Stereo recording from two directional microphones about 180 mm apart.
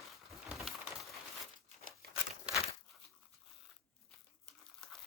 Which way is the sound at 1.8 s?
50° right (ahead or behind).